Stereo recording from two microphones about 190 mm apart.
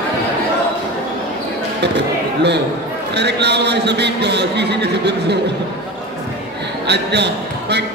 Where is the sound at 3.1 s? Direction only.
60° right (ahead or behind).